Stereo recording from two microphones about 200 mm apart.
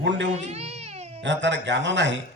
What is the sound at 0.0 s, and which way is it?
Speech, 65° right (ahead or behind).